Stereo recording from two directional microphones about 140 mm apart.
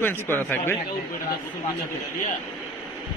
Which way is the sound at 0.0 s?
15° left (ahead or behind).